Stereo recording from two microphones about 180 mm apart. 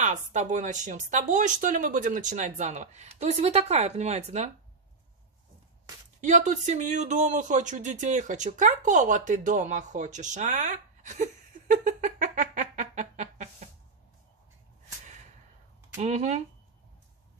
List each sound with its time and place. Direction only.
0.0 s speech: 40° right (ahead or behind)
6.2 s speech: 45° right (ahead or behind)
16.0 s speech: 40° right (ahead or behind)